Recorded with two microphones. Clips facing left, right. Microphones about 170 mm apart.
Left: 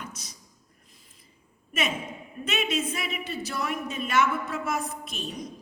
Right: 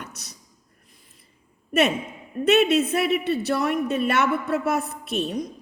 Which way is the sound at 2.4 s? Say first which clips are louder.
Right 11 dB; 65° right (ahead or behind).